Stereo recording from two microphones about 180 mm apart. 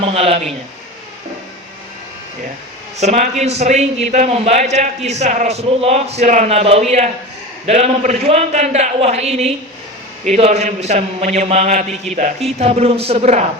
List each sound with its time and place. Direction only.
0.0 s a man's voice: 35° right (ahead or behind)
3.0 s a man's voice: 40° right (ahead or behind)